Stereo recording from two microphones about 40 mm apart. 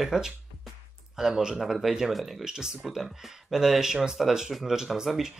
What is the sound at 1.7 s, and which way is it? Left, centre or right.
Speech, centre.